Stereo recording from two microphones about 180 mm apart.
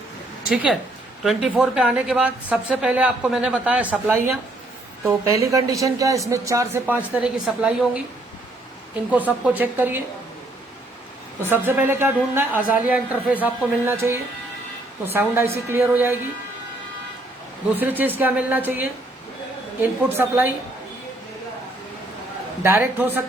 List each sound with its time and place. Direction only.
0.5 s a woman's voice: 5° right (ahead or behind)
9.6 s a woman's voice: 10° right (ahead or behind)
11.4 s a woman's voice: 10° right (ahead or behind)
17.7 s a woman's voice: 10° right (ahead or behind)
22.6 s a woman's voice: 10° right (ahead or behind)